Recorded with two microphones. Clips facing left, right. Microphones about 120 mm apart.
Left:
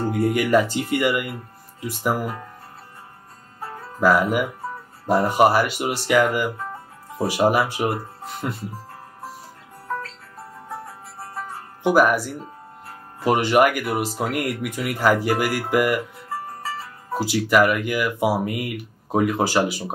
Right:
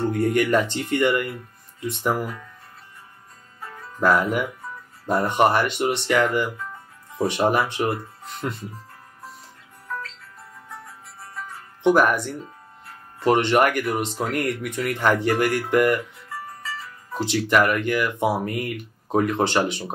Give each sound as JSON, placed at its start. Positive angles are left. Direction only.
{"t": 0.1, "sound": "speech", "side_deg": 5}
{"t": 2.2, "sound": "speech", "side_deg": 40}
{"t": 3.6, "sound": "music", "side_deg": 40}
{"t": 4.0, "sound": "speech", "side_deg": 5}
{"t": 9.8, "sound": "music", "side_deg": 40}
{"t": 11.8, "sound": "speech", "side_deg": 5}
{"t": 16.3, "sound": "music", "side_deg": 40}
{"t": 17.2, "sound": "speech", "side_deg": 5}